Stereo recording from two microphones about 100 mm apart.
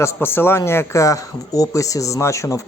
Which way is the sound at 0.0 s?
25° left (ahead or behind).